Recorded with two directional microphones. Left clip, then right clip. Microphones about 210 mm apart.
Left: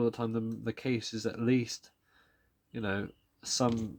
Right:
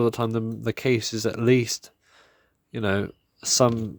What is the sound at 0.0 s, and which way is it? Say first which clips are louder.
Speech: right 8 dB; 40° right (ahead or behind).